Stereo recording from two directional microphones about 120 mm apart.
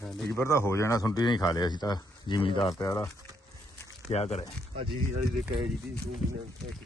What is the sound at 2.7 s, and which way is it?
Speech, 30° left (ahead or behind).